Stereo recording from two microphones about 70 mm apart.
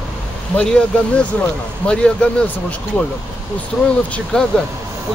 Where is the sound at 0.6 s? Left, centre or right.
Centre.